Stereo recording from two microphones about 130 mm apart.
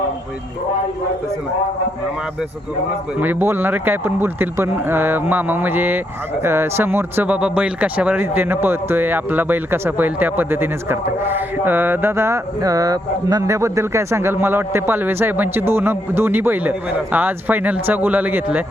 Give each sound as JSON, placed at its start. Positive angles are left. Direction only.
{"t": 3.2, "sound": "speech", "side_deg": -15}